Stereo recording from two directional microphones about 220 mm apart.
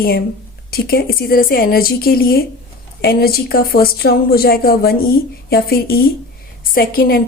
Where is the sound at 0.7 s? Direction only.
45° left (ahead or behind).